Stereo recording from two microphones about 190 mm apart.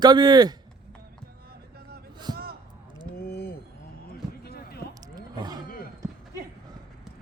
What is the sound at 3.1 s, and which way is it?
Mechanisms, 55° left (ahead or behind).